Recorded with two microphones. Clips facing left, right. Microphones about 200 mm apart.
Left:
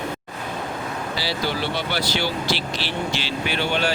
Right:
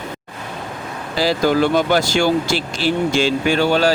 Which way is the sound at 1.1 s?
45° right (ahead or behind).